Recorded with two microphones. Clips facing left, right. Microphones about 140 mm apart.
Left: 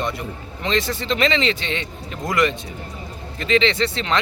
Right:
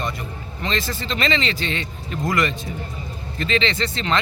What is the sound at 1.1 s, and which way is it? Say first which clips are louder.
Speech: left 2 dB; 15° left (ahead or behind).